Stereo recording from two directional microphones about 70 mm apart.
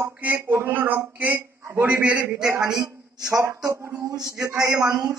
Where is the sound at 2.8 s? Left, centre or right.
Right.